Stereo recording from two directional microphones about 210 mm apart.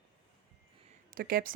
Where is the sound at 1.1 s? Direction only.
45° right (ahead or behind).